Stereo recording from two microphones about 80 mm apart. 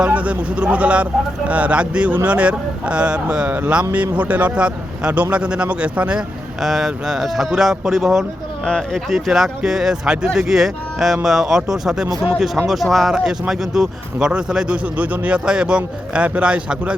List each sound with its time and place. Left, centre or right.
0.0 s speech: centre
6.6 s speech: centre